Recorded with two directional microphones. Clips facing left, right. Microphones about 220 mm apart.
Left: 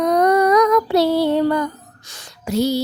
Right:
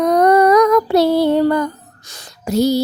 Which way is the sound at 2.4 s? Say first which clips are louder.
Right 4 dB; 40° right (ahead or behind).